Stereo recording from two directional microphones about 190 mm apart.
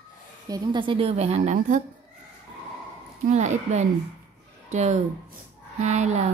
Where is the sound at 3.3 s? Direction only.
40° right (ahead or behind).